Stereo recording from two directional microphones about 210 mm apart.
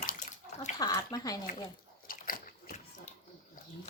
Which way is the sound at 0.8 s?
20° left (ahead or behind).